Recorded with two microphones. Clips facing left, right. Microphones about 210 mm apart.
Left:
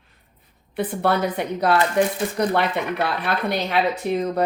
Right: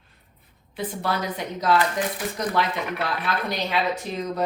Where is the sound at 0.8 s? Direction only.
60° left (ahead or behind).